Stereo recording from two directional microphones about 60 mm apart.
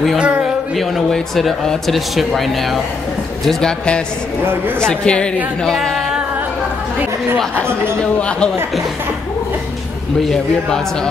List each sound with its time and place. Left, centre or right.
0.2 s speech: centre
0.7 s speech: centre
4.7 s a woman's voice: centre
7.6 s speech: right
8.0 s a woman's voice: centre